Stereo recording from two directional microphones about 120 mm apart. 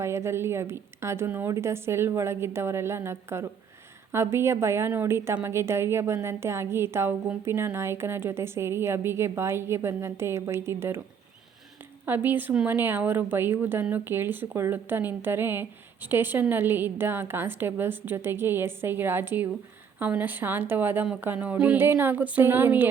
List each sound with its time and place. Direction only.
0.0 s a woman's voice: 20° right (ahead or behind)
12.0 s a woman's voice: 15° right (ahead or behind)